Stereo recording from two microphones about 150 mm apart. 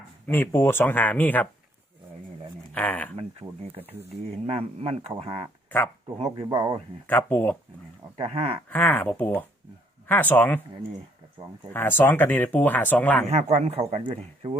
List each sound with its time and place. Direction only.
0.3 s speech: 15° left (ahead or behind)
2.7 s speech: 10° left (ahead or behind)
3.8 s speech: 15° right (ahead or behind)
4.3 s speech: 40° right (ahead or behind)
6.4 s speech: 25° right (ahead or behind)
7.1 s speech: 10° left (ahead or behind)
8.2 s speech: 40° right (ahead or behind)
8.7 s speech: 10° left (ahead or behind)
11.7 s speech: 15° left (ahead or behind)
13.3 s speech: 45° right (ahead or behind)